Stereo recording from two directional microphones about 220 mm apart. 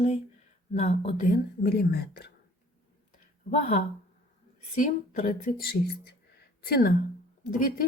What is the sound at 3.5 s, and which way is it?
Speech, 35° left (ahead or behind).